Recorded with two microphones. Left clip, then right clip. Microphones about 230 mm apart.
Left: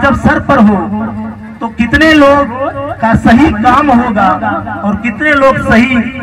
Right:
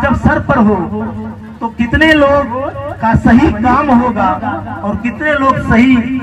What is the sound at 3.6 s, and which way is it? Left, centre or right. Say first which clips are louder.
A man's voice: left 3 dB; left.